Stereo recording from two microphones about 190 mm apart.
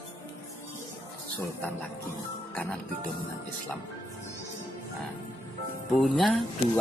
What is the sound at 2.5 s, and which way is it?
Music, 10° left (ahead or behind).